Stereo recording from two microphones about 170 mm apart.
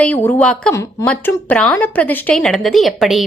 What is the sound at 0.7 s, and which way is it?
A woman's voice, 15° left (ahead or behind).